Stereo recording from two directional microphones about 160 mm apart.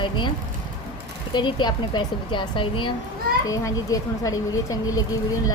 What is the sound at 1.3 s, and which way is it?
A woman's voice, 30° left (ahead or behind).